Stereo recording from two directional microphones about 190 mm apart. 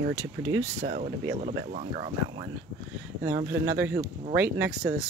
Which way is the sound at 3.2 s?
15° right (ahead or behind).